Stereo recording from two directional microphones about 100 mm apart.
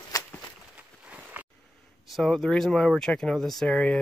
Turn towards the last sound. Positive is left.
turn(degrees=5)  # may be behind; listen again after turning